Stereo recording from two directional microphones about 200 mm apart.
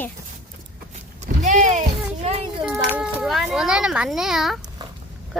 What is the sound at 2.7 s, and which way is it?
A child's voice, 5° right (ahead or behind).